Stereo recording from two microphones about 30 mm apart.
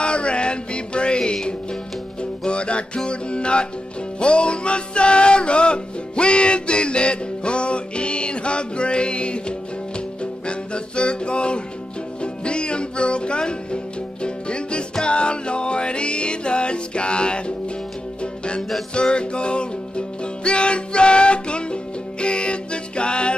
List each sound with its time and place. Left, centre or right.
0.0 s music: left
10.4 s music: left